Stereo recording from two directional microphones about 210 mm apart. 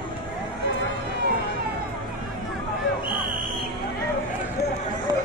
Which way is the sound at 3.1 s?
20° left (ahead or behind).